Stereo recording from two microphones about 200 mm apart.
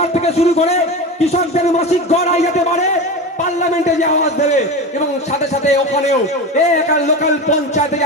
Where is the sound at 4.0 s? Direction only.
35° left (ahead or behind).